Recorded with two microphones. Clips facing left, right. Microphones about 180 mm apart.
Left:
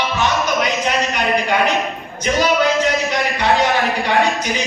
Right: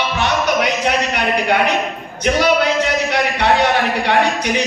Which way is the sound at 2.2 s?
65° right (ahead or behind).